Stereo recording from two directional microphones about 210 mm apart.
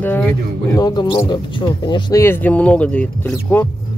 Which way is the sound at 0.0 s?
5° left (ahead or behind).